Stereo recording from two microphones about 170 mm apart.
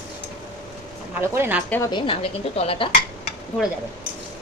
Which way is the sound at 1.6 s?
10° left (ahead or behind).